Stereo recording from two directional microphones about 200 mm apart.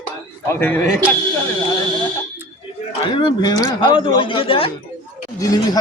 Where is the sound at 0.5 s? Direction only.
10° left (ahead or behind).